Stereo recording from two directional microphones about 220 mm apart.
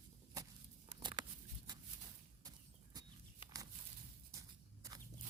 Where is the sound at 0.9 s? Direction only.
20° right (ahead or behind).